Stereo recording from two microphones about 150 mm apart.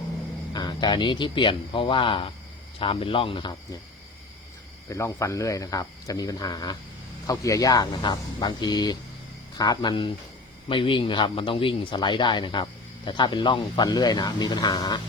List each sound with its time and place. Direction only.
0.5 s speech: 30° left (ahead or behind)
4.9 s speech: 20° left (ahead or behind)